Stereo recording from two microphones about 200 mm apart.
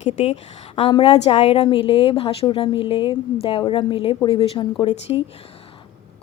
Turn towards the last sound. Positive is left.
turn(degrees=30)  # may be behind; listen again after turning